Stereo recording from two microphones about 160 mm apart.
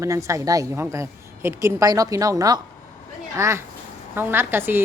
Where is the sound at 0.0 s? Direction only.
20° right (ahead or behind).